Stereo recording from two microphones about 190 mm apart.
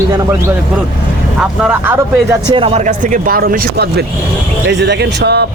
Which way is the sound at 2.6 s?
30° right (ahead or behind).